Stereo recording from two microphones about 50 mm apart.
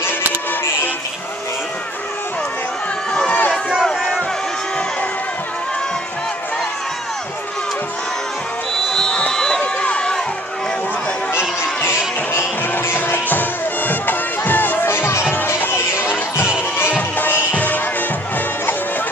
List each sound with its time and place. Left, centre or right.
3.8 s crowd: centre
8.9 s a sound: centre
9.6 s run: left
12.3 s music: left
14.9 s music: left